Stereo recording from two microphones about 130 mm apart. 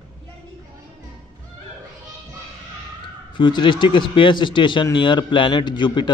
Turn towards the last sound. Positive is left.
turn(degrees=35)  # may be behind; listen again after turning